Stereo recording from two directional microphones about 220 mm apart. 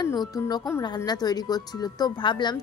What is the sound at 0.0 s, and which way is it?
Speech, 20° left (ahead or behind).